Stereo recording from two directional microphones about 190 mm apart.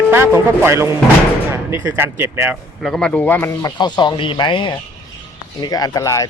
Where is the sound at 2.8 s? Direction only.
5° left (ahead or behind).